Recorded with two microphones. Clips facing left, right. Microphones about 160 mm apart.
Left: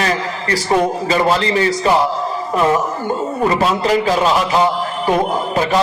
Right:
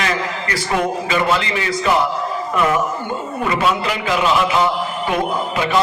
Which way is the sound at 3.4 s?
35° left (ahead or behind).